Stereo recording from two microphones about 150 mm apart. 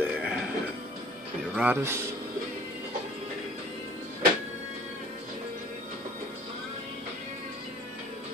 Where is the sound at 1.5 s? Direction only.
15° right (ahead or behind).